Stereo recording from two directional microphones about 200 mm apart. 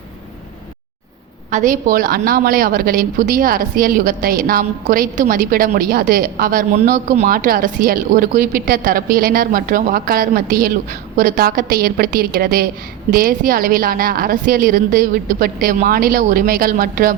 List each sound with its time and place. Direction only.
1.5 s a woman's voice: 40° right (ahead or behind)